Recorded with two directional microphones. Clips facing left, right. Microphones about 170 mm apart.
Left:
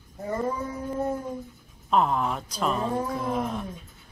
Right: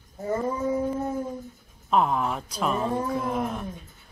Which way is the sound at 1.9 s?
Centre (ahead or behind).